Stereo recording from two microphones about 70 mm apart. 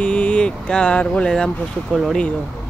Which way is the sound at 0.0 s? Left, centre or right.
Centre.